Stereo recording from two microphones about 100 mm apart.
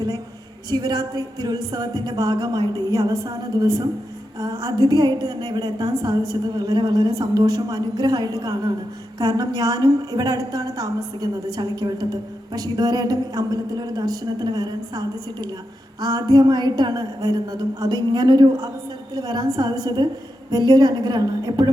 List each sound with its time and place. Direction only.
0.7 s a woman's voice: 40° right (ahead or behind)